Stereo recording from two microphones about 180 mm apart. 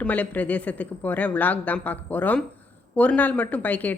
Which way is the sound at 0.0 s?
10° left (ahead or behind).